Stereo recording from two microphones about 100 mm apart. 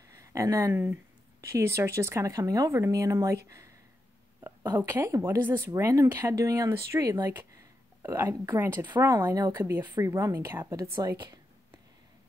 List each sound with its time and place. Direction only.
0.1 s speech: 30° right (ahead or behind)
4.7 s a woman's voice: 25° right (ahead or behind)
9.0 s speech: 35° right (ahead or behind)
9.8 s speech: 25° right (ahead or behind)